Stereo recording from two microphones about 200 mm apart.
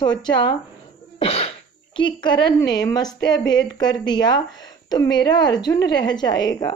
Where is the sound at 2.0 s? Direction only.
25° left (ahead or behind).